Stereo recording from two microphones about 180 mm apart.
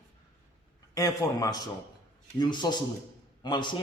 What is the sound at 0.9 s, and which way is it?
A man's voice, 20° left (ahead or behind).